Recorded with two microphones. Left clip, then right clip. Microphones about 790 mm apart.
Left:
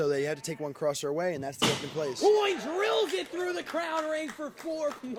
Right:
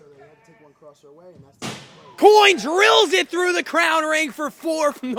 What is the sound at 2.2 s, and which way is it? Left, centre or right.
Speech, right.